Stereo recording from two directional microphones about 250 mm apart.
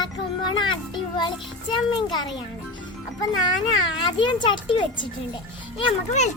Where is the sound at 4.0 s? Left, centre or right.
Centre.